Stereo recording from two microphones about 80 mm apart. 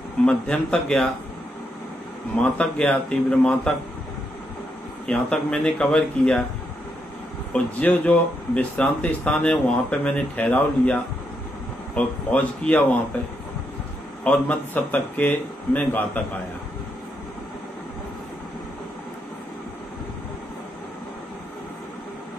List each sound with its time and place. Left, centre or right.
0.2 s speech: centre
2.3 s speech: centre
5.0 s speech: centre
7.5 s a man's voice: centre
14.2 s a man's voice: centre